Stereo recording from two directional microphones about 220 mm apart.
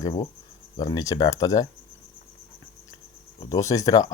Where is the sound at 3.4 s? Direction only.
15° left (ahead or behind).